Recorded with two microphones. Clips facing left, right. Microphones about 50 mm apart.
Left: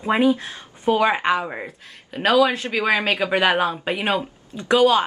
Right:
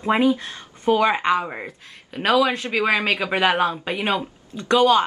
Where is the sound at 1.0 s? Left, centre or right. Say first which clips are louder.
Left 1 dB; centre.